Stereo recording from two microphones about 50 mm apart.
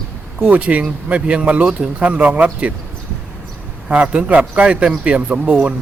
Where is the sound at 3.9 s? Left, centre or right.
Right.